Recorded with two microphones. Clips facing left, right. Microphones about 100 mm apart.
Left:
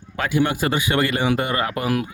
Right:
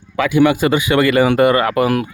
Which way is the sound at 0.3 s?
90° right.